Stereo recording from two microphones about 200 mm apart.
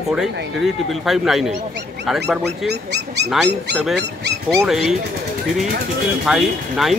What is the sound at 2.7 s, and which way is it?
Speech, 55° right (ahead or behind).